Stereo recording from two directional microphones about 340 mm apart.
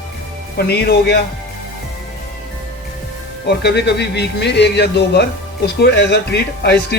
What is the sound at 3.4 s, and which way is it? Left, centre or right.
Speech, left.